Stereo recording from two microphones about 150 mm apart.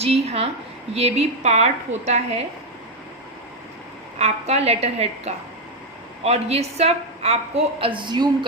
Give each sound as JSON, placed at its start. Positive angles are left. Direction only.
{"t": 0.0, "sound": "a woman's voice", "side_deg": -45}
{"t": 4.2, "sound": "a woman's voice", "side_deg": -45}